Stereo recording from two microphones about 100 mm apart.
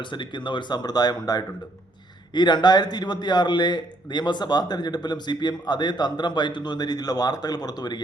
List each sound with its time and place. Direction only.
0.0 s a man's voice: 55° left (ahead or behind)